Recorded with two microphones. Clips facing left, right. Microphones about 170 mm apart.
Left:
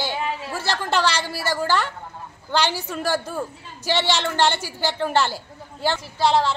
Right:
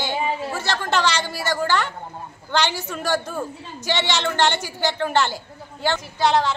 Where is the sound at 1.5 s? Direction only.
5° left (ahead or behind).